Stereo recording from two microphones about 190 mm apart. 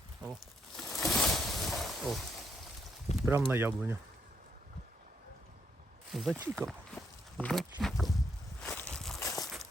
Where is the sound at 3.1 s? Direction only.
35° left (ahead or behind).